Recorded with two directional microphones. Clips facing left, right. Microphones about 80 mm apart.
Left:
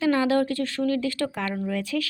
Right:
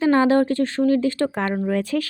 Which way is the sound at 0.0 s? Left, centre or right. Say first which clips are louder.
Right 5 dB; right.